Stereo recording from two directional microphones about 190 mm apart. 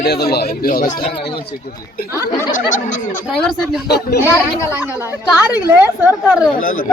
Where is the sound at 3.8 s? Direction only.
60° left (ahead or behind).